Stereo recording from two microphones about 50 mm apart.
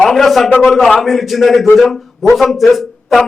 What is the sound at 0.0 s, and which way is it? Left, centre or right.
Speech, centre.